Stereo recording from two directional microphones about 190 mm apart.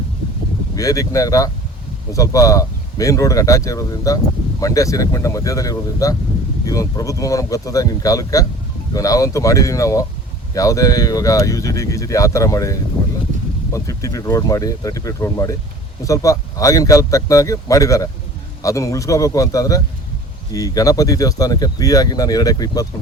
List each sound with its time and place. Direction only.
0.8 s speech: 15° left (ahead or behind)
13.7 s speech: 15° left (ahead or behind)